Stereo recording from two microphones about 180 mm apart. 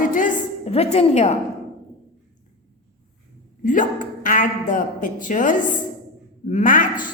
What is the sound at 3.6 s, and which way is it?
A woman's voice, 45° left (ahead or behind).